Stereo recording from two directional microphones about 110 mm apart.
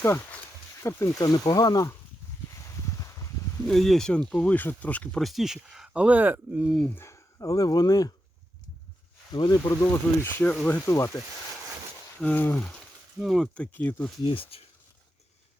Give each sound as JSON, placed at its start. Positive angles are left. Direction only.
{"t": 0.0, "sound": "speech", "side_deg": 20}
{"t": 1.2, "sound": "speech", "side_deg": 35}
{"t": 2.5, "sound": "a sound", "side_deg": 30}
{"t": 3.7, "sound": "speech", "side_deg": 0}
{"t": 5.2, "sound": "speech", "side_deg": 0}
{"t": 6.9, "sound": "speech", "side_deg": 25}
{"t": 9.3, "sound": "speech", "side_deg": 40}
{"t": 9.6, "sound": "speech", "side_deg": 25}
{"t": 10.8, "sound": "speech", "side_deg": 30}
{"t": 12.2, "sound": "speech", "side_deg": 15}
{"t": 13.1, "sound": "speech", "side_deg": 0}
{"t": 14.3, "sound": "speech", "side_deg": 55}